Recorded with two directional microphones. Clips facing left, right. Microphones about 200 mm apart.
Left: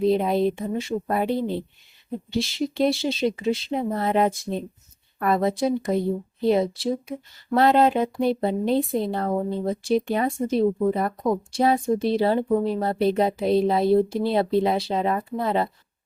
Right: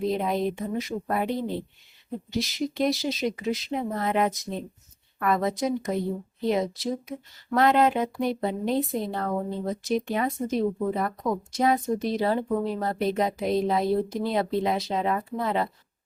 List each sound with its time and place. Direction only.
0.1 s speech: 30° left (ahead or behind)